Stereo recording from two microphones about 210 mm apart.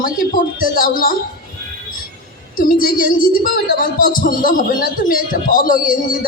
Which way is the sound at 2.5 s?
40° left (ahead or behind).